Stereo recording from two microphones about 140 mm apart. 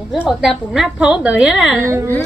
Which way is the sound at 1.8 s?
20° right (ahead or behind).